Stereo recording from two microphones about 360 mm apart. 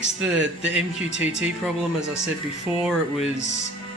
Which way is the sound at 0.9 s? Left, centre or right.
Centre.